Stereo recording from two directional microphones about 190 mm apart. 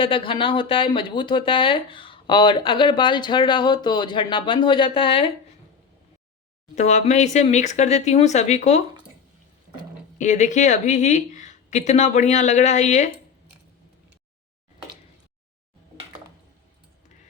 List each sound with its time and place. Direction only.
0.0 s speech: 25° left (ahead or behind)
6.7 s speech: 35° left (ahead or behind)
10.2 s speech: 40° left (ahead or behind)